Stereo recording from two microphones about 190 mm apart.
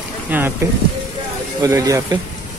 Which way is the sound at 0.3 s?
10° right (ahead or behind).